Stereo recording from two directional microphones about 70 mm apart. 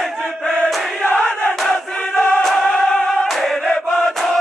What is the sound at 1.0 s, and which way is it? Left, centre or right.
Choir, centre.